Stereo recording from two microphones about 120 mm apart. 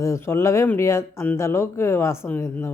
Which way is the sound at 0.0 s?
20° left (ahead or behind).